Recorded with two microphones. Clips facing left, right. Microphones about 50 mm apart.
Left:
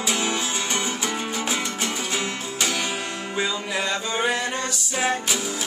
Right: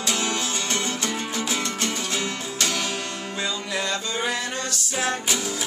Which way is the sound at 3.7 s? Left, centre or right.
Centre.